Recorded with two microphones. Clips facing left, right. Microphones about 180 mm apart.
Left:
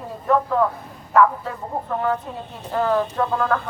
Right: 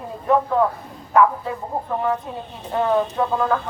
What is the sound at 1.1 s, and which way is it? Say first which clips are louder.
A woman's voice: even; 15° right (ahead or behind).